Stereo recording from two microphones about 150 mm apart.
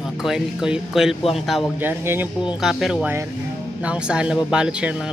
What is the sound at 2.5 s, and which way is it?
Speech, 5° right (ahead or behind).